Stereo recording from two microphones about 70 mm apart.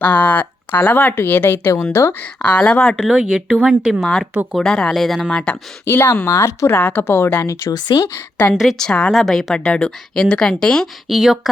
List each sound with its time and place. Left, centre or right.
0.0 s speech: left
2.1 s speech: centre
2.9 s speech: centre
4.0 s a woman's voice: centre
5.3 s speech: centre
5.9 s speech: left
6.7 s a woman's voice: left
7.4 s speech: left
7.7 s speech: left
8.8 s speech: centre
9.1 s a woman's voice: centre
9.6 s speech: centre
11.1 s a woman's voice: centre